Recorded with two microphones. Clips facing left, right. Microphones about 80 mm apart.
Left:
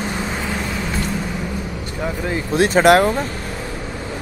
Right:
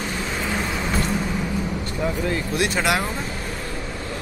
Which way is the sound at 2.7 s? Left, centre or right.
Left.